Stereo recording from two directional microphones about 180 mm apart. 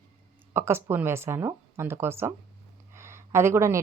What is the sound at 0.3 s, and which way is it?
A woman's voice, 15° right (ahead or behind).